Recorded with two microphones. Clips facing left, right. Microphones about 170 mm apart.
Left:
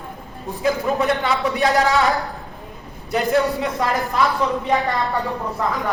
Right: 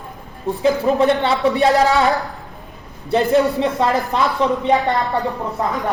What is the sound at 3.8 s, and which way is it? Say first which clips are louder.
Speech: right 4 dB; 30° right (ahead or behind).